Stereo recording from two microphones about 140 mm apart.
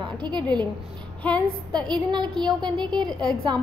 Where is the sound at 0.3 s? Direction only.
30° right (ahead or behind).